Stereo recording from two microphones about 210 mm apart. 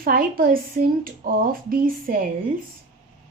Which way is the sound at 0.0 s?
45° right (ahead or behind).